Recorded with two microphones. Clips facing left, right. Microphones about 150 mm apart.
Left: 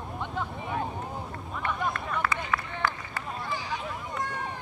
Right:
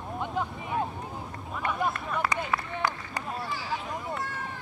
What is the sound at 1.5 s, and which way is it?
Run, 5° right (ahead or behind).